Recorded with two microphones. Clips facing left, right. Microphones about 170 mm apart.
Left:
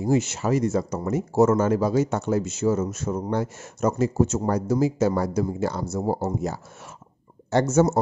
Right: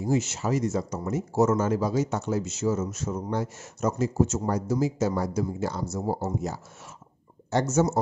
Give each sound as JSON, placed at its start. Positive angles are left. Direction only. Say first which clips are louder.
{"t": 0.0, "sound": "speech", "louder": "left 4 dB", "side_deg": 60}